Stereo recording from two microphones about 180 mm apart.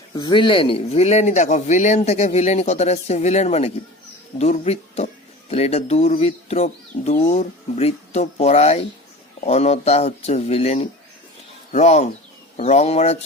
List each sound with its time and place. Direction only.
0.1 s speech: 25° left (ahead or behind)